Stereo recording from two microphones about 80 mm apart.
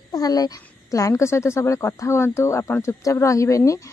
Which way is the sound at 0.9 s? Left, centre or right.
Left.